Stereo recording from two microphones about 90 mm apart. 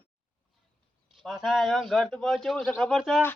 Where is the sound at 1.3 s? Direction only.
Centre (ahead or behind).